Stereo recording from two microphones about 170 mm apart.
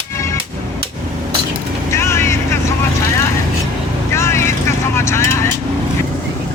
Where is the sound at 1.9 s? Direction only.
15° left (ahead or behind).